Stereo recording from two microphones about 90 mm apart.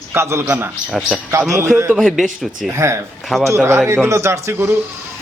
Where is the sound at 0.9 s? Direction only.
10° right (ahead or behind).